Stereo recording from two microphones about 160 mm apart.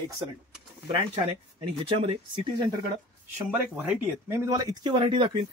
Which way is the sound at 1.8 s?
35° right (ahead or behind).